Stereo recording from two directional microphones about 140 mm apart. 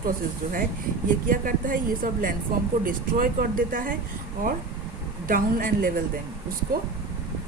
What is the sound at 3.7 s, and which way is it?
Speech, 75° right (ahead or behind).